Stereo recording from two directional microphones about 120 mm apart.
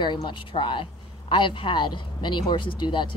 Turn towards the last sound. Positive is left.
turn(degrees=40)  # may be behind; listen again after turning